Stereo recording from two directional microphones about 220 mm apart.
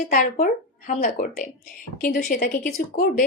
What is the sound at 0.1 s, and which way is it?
A woman's voice, 35° left (ahead or behind).